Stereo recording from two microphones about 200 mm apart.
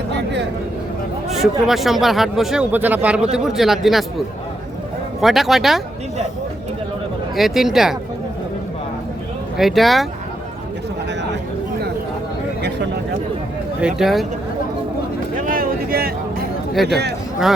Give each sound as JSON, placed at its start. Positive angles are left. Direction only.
{"t": 1.3, "sound": "speech", "side_deg": 0}
{"t": 5.2, "sound": "speech", "side_deg": 0}
{"t": 7.3, "sound": "speech", "side_deg": 0}
{"t": 9.6, "sound": "speech", "side_deg": 0}
{"t": 13.8, "sound": "speech", "side_deg": 0}
{"t": 15.4, "sound": "a sound", "side_deg": -45}
{"t": 16.8, "sound": "a man's voice", "side_deg": -55}